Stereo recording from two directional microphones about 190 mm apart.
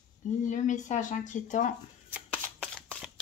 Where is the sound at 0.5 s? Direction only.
40° left (ahead or behind).